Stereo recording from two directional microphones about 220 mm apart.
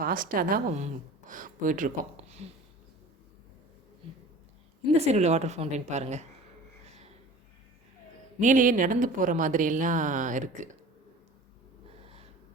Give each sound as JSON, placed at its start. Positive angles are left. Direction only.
{"t": 0.0, "sound": "speech", "side_deg": -40}
{"t": 4.9, "sound": "speech", "side_deg": -30}
{"t": 8.4, "sound": "speech", "side_deg": -35}